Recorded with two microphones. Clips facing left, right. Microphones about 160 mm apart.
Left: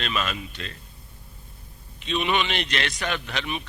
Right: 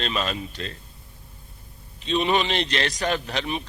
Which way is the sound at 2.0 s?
35° right (ahead or behind).